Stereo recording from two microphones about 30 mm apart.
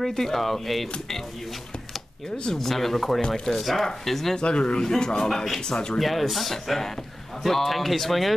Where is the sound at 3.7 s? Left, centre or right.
Centre.